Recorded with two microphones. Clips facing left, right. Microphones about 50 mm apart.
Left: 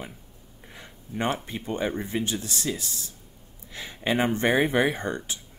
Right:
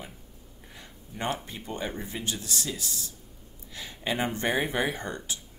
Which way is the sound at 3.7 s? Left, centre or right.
Left.